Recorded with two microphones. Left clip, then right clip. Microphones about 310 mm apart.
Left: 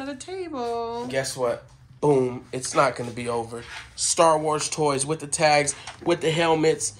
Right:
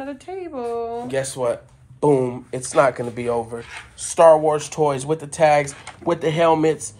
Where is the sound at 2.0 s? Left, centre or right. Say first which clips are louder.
Right 3 dB; right.